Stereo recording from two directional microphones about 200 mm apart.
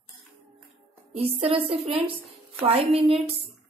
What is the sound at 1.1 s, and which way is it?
A woman's voice, 30° right (ahead or behind).